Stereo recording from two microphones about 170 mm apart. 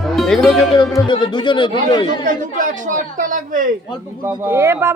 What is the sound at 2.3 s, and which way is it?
A woman's voice, 50° right (ahead or behind).